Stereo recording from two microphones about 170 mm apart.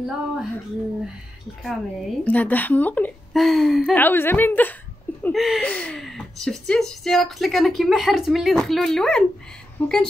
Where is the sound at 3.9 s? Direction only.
10° left (ahead or behind).